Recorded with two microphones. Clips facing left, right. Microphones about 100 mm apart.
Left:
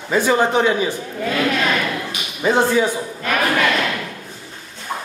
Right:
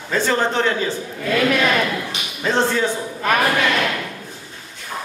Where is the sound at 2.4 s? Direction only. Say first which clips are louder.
Left 3 dB; 10° left (ahead or behind).